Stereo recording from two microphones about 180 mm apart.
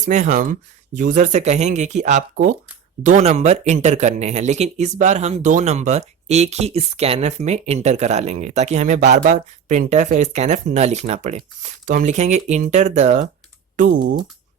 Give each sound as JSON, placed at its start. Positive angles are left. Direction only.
{"t": 0.0, "sound": "speech", "side_deg": -40}